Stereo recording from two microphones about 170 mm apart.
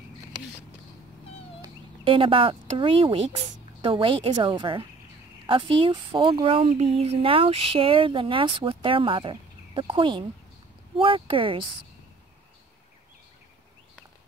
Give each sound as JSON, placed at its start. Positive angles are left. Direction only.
{"t": 1.6, "sound": "a woman's voice", "side_deg": -30}